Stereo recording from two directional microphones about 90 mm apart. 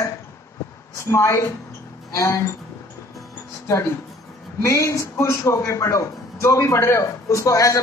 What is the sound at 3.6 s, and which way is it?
Speech, 30° left (ahead or behind).